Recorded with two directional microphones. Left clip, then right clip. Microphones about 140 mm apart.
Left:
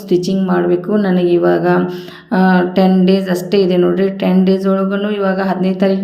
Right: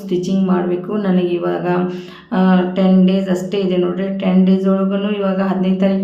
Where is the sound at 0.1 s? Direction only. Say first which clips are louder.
Left 4 dB; 30° left (ahead or behind).